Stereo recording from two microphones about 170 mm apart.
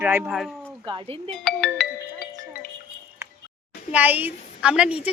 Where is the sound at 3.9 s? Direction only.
10° right (ahead or behind).